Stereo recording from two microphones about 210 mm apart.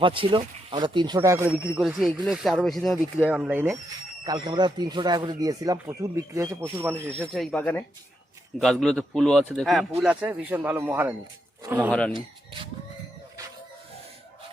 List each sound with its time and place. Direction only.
0.0 s speech: 25° right (ahead or behind); by 3.8 s 5° right (ahead or behind)
4.2 s speech: 20° right (ahead or behind)
7.3 s speech: 5° left (ahead or behind)
11.9 s speech: 5° left (ahead or behind)